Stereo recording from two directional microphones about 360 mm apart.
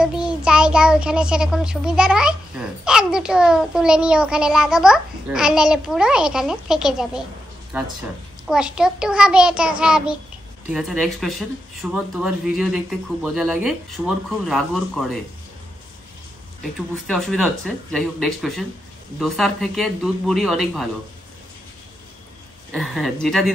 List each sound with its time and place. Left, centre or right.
0.0 s a child's voice: centre
17.1 s speech: centre
22.7 s speech: centre